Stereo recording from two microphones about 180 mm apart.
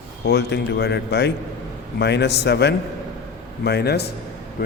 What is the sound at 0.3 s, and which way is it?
A man's voice, 70° left (ahead or behind).